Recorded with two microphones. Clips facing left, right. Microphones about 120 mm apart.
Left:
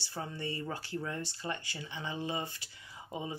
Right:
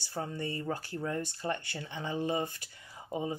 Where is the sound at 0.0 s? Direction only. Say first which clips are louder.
Right 3 dB; 45° right (ahead or behind).